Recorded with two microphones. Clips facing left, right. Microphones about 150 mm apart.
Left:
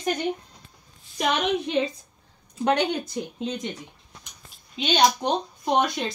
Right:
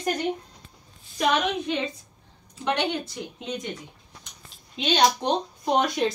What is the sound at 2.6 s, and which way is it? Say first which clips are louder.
Speech: left 3 dB; 40° left (ahead or behind).